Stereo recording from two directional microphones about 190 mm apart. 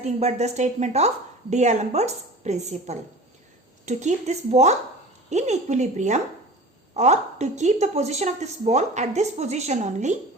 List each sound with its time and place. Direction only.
0.0 s a woman's voice: 35° right (ahead or behind)